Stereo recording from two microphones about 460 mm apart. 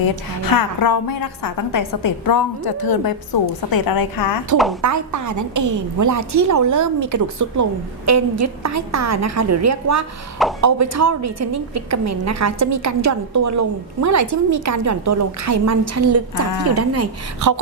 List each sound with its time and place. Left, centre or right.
0.0 s a woman's voice: left
4.5 s speech: centre
4.8 s a woman's voice: right